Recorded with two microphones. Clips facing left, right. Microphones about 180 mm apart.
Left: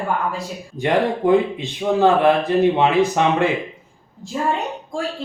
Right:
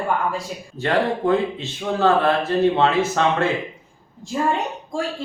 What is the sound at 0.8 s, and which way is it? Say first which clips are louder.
Speech: left 2 dB; 15° left (ahead or behind).